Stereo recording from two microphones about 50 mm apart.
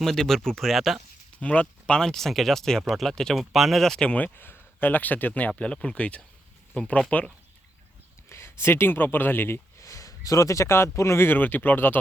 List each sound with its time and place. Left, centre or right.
0.0 s speech: centre
1.4 s speech: left
2.0 s speech: centre
3.3 s speech: centre
3.9 s speech: left
4.4 s speech: left
8.3 s a sound: left
9.0 s speech: left
9.7 s a man's voice: left
11.3 s speech: left